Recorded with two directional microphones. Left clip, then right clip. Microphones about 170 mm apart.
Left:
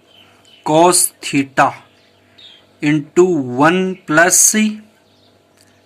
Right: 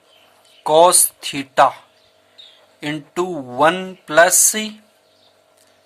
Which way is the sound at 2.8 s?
40° right (ahead or behind).